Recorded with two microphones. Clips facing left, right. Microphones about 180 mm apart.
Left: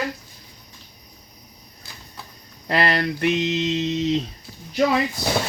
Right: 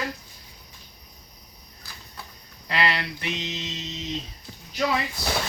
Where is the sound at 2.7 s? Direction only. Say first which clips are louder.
Left 6 dB; 45° left (ahead or behind); by 4.1 s 60° left (ahead or behind).